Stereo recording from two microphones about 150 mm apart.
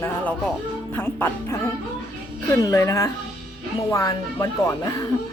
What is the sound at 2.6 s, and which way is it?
Speech, 20° left (ahead or behind).